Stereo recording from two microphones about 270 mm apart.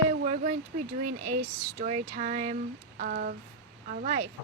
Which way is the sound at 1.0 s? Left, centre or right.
Right.